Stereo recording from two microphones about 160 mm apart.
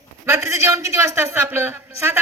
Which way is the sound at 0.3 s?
15° right (ahead or behind).